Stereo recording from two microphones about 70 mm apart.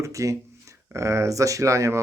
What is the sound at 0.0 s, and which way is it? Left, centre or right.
Speech, right.